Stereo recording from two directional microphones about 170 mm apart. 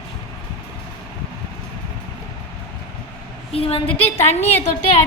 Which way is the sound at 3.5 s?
35° left (ahead or behind).